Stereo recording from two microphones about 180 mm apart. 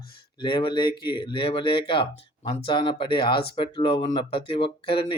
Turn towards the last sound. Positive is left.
turn(degrees=30)  # may be behind; listen again after turning